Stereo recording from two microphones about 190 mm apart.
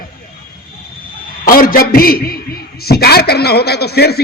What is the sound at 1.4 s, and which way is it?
A man's voice, 50° left (ahead or behind).